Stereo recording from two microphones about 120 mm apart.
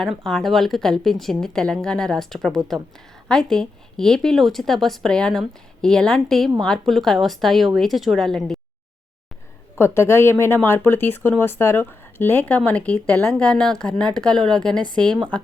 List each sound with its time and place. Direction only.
0.0 s a woman's voice: centre (ahead or behind)
9.7 s speech: 20° left (ahead or behind)
14.3 s a woman's voice: 35° right (ahead or behind)
14.6 s speech: 5° left (ahead or behind)